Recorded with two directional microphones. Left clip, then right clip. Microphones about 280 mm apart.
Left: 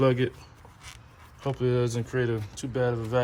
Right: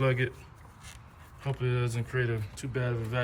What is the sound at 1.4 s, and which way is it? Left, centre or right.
Speech, centre.